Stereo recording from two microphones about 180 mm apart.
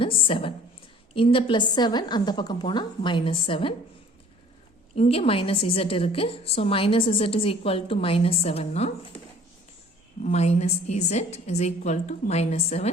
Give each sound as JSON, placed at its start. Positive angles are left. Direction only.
{"t": 0.0, "sound": "a woman's voice", "side_deg": 30}
{"t": 4.9, "sound": "a woman's voice", "side_deg": 35}
{"t": 10.2, "sound": "a woman's voice", "side_deg": 35}